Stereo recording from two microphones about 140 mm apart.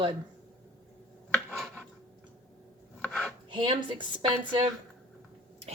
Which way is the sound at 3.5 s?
35° right (ahead or behind).